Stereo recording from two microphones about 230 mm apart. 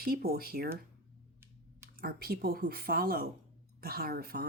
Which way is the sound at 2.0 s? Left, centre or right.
Right.